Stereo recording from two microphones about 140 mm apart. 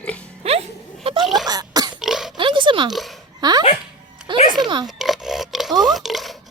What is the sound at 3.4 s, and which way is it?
Dog, 30° right (ahead or behind).